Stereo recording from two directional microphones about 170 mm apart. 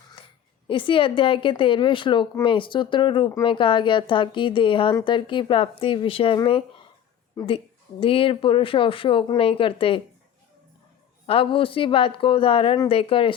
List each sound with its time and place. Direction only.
0.7 s speech: 30° left (ahead or behind)
11.3 s speech: 30° left (ahead or behind)